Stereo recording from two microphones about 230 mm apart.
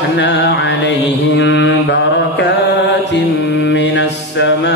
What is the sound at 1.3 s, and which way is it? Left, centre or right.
Mantra, left.